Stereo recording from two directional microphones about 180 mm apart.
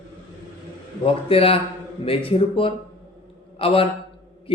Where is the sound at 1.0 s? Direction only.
30° left (ahead or behind).